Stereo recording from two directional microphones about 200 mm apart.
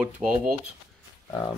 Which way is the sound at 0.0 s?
5° right (ahead or behind).